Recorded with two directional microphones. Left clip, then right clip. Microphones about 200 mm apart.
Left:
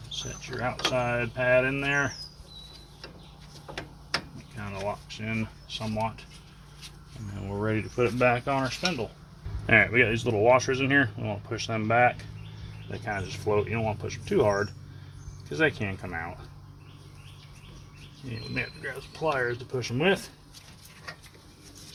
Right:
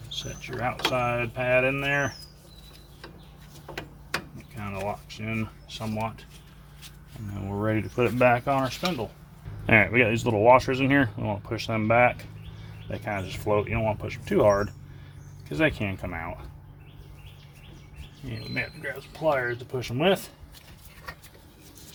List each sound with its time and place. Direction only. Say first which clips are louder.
0.1 s speech: right 1 dB; 30° right (ahead or behind)
4.5 s a sound: right 2 dB; 25° right (ahead or behind)
4.9 s speech: even; 25° right (ahead or behind)
7.3 s speech: right 2 dB; 25° right (ahead or behind)
18.8 s speech: right 2 dB; 25° right (ahead or behind)